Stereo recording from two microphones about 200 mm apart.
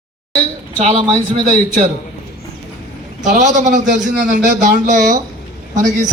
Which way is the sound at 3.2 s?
40° right (ahead or behind).